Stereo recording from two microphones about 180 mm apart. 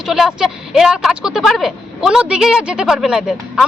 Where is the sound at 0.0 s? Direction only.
Centre (ahead or behind).